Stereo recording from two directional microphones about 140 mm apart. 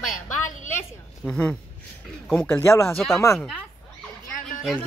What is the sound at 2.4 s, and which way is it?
Speech, 15° left (ahead or behind).